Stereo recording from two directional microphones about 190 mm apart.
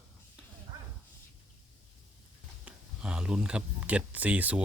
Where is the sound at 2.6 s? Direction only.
5° right (ahead or behind).